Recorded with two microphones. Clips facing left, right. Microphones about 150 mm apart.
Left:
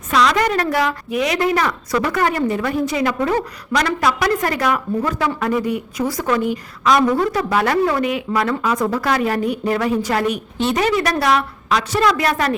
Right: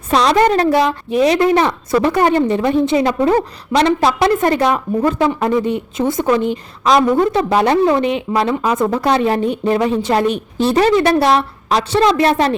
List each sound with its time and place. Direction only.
0.1 s a woman's voice: 30° right (ahead or behind)